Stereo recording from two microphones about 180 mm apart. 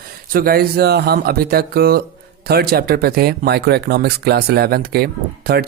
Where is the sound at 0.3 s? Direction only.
55° right (ahead or behind).